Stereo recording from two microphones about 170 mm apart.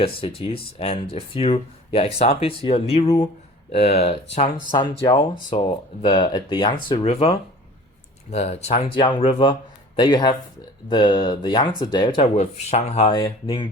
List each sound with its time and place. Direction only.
0.0 s speech: 35° left (ahead or behind)
9.0 s speech: 30° left (ahead or behind)